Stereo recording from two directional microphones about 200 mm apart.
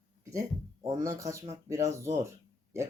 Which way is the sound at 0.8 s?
15° right (ahead or behind).